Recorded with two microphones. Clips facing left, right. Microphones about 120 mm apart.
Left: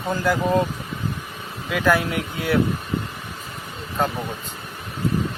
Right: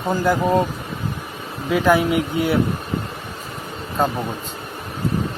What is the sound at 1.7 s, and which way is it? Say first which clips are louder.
Speech: right 4 dB; 15° right (ahead or behind).